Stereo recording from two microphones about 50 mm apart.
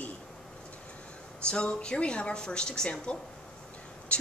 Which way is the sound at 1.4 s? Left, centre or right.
Centre.